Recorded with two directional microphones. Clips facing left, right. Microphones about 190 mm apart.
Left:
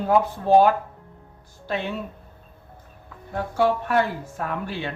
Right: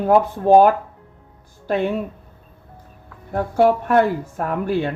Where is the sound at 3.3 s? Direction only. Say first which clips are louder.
Right 5 dB; 50° right (ahead or behind).